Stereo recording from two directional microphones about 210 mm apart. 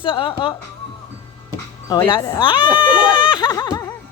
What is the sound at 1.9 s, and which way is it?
Speech, 20° left (ahead or behind).